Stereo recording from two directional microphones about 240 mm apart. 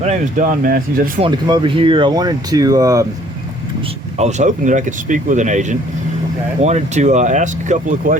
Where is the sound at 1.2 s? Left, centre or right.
Centre.